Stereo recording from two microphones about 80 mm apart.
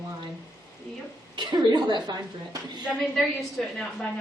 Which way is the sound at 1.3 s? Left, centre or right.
Right.